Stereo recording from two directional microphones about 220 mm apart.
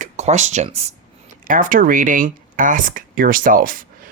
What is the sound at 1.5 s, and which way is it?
Speech, 40° right (ahead or behind).